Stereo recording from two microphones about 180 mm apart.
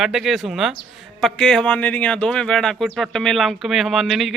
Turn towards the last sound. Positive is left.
turn(degrees=0)  # may be behind; listen again after turning